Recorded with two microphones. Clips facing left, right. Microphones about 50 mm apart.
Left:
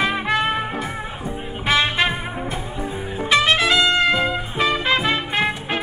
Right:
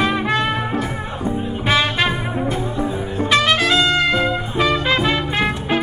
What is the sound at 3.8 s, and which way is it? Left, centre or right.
Music, centre.